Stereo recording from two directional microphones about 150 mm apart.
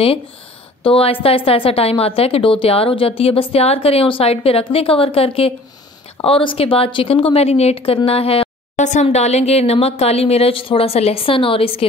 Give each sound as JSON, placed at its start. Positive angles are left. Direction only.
{"t": 0.8, "sound": "a woman's voice", "side_deg": 35}